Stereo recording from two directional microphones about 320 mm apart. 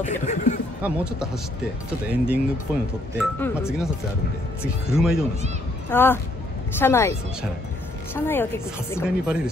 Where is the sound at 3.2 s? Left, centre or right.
Centre.